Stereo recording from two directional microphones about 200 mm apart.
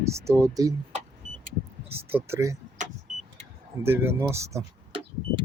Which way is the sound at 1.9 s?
10° right (ahead or behind).